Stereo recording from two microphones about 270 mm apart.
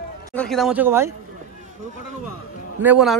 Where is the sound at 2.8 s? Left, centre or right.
Centre.